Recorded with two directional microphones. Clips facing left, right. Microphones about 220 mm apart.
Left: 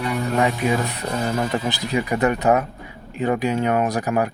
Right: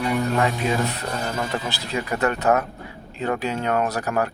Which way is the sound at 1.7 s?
15° left (ahead or behind).